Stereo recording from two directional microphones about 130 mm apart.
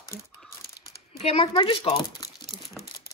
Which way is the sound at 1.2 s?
50° left (ahead or behind).